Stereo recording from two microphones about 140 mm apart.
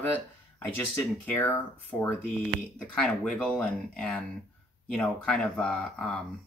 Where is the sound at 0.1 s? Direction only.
15° left (ahead or behind).